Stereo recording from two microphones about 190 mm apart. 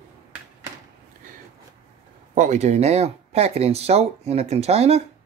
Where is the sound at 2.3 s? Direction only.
40° right (ahead or behind).